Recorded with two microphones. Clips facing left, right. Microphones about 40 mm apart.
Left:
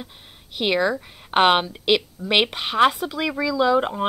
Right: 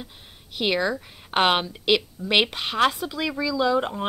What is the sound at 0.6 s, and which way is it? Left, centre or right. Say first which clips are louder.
Speech: left 3 dB; centre.